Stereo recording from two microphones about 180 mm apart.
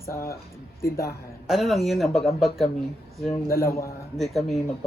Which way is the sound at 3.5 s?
15° left (ahead or behind).